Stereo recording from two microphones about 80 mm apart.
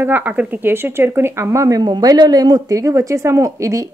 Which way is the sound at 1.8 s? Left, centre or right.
Right.